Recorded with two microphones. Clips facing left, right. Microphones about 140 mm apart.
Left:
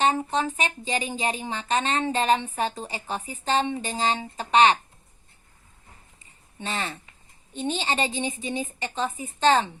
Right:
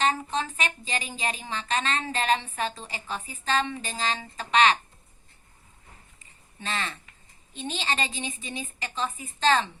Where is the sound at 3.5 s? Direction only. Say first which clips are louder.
Left 3 dB; 20° left (ahead or behind).